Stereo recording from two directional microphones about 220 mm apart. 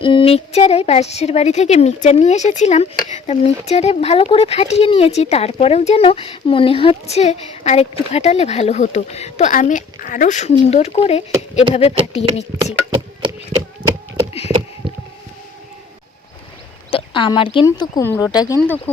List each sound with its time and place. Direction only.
0.0 s a woman's voice: 25° left (ahead or behind)
16.9 s a woman's voice: 25° left (ahead or behind)